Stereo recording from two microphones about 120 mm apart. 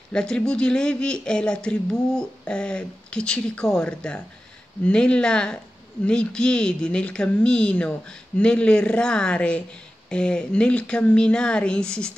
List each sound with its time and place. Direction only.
0.1 s speech: 5° left (ahead or behind)